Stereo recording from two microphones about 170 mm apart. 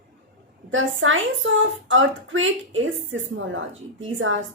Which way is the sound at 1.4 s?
90° right.